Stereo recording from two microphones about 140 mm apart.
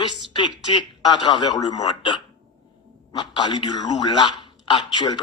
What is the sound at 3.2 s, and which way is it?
A man's voice, 35° left (ahead or behind).